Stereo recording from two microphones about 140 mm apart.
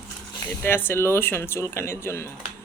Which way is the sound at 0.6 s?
15° left (ahead or behind).